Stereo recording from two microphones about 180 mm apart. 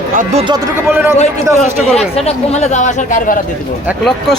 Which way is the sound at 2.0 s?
35° left (ahead or behind).